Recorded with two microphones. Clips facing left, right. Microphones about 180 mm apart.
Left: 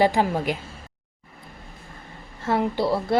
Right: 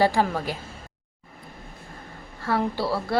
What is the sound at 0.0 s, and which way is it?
Speech, 20° left (ahead or behind).